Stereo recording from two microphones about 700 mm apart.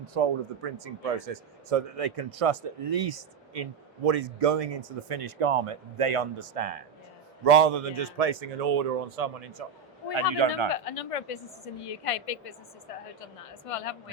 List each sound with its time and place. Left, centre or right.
0.1 s a man's voice: right
10.4 s speech: right
10.8 s a woman's voice: left